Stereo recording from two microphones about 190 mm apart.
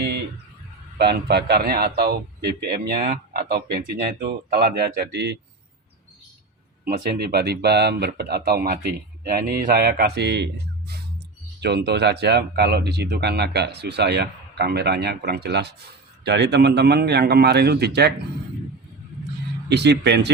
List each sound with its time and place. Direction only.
0.9 s a man's voice: 60° right (ahead or behind)
6.8 s a man's voice: 50° right (ahead or behind)
19.6 s a man's voice: 60° right (ahead or behind)